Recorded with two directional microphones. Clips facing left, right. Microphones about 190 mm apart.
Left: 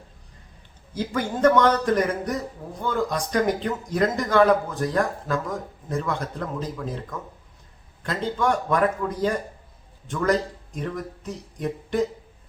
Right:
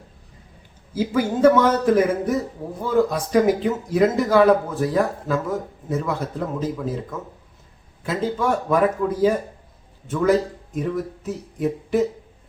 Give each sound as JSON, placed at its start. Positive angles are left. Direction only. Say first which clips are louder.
{"t": 0.9, "sound": "speech", "louder": "right 5 dB", "side_deg": -5}